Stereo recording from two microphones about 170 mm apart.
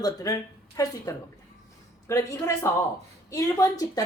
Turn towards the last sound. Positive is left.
turn(degrees=20)  # may be behind; listen again after turning